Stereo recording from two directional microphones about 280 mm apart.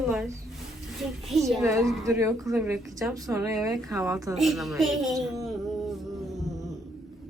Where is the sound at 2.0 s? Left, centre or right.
Centre.